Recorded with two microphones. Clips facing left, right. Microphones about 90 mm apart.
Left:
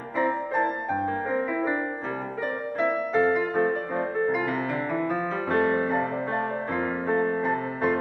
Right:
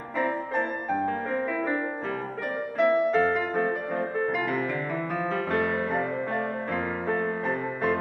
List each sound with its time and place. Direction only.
0.2 s music: 5° left (ahead or behind)
2.8 s music: 5° left (ahead or behind)
5.5 s music: 30° left (ahead or behind)
6.7 s music: 15° left (ahead or behind)